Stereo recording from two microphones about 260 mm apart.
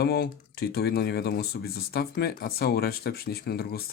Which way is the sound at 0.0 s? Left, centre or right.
Left.